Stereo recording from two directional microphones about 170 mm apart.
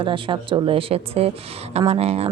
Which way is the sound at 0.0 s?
30° right (ahead or behind).